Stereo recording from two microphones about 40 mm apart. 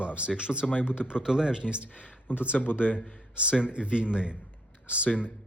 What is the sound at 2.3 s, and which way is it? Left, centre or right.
Speech, left.